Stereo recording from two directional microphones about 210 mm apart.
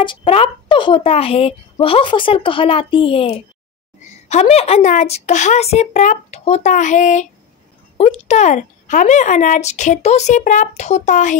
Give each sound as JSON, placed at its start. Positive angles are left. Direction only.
{"t": 0.0, "sound": "speech", "side_deg": 25}